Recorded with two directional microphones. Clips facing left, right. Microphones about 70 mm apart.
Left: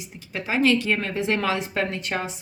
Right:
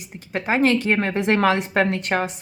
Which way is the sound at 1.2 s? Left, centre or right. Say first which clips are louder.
Right 5 dB; right.